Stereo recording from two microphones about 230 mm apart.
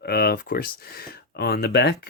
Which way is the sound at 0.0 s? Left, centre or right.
Left.